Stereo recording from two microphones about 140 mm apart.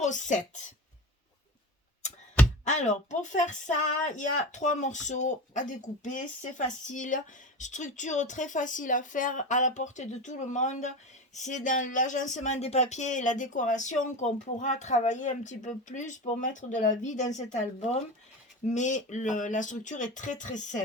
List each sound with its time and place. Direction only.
0.0 s speech: 60° left (ahead or behind)
2.6 s speech: 60° left (ahead or behind)